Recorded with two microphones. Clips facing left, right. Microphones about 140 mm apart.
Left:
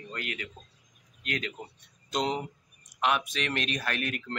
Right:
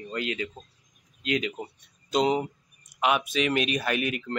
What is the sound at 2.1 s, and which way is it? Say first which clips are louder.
Speech: right 6 dB; 5° right (ahead or behind).